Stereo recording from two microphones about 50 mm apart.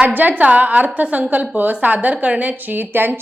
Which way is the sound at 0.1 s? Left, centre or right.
Right.